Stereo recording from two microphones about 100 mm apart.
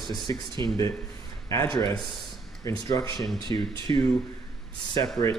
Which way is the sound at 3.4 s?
60° right (ahead or behind).